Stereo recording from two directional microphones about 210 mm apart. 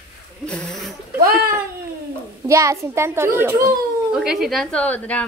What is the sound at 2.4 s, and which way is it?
A child's voice, 15° right (ahead or behind).